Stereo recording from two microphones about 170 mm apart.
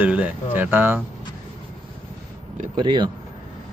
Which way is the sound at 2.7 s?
25° right (ahead or behind).